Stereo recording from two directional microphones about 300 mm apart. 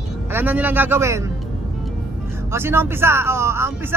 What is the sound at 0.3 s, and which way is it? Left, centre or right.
A man's voice, centre.